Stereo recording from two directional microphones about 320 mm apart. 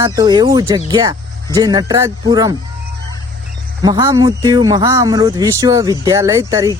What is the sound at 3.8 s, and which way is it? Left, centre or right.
Speech, centre.